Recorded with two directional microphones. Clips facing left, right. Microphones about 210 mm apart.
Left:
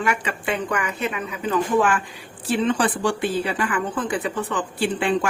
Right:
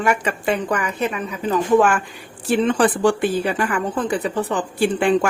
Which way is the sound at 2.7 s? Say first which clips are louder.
Right 6 dB; 50° right (ahead or behind).